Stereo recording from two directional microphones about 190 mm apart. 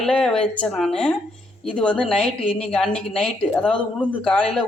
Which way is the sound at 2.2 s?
30° left (ahead or behind).